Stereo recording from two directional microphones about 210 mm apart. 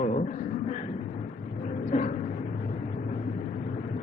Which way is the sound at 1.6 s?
35° left (ahead or behind).